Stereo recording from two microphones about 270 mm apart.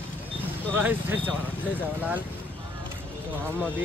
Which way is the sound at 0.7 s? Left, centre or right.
Centre.